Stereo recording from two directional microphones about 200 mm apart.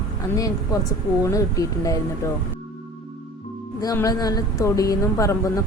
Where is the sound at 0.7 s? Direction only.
15° left (ahead or behind).